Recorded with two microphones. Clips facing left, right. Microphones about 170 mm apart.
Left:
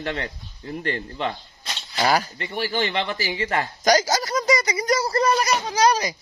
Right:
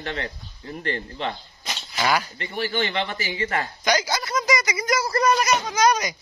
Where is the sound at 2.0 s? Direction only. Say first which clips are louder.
Left 2 dB; 40° left (ahead or behind).